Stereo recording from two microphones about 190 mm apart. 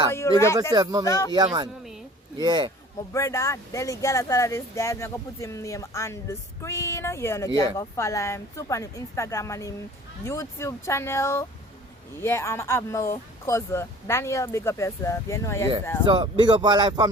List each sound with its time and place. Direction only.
0.1 s speech: 15° left (ahead or behind)
0.7 s speech: 20° right (ahead or behind)
1.0 s speech: 15° left (ahead or behind)
2.4 s speech: 20° right (ahead or behind)
3.1 s speech: 15° left (ahead or behind)
16.0 s speech: 25° right (ahead or behind)